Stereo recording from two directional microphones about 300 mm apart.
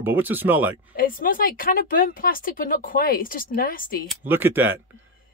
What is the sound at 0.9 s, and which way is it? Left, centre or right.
Speech, left.